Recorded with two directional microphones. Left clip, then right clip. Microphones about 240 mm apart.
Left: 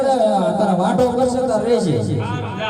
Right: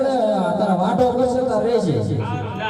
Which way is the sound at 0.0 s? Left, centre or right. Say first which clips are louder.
Left 3 dB; centre.